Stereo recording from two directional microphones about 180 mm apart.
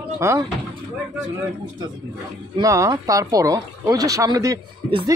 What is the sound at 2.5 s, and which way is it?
A woman's voice, 15° right (ahead or behind).